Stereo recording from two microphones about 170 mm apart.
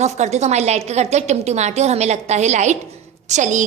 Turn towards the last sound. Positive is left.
turn(degrees=-45)  # may be behind; listen again after turning